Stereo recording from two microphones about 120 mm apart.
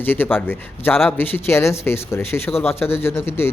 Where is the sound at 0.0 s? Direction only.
15° left (ahead or behind).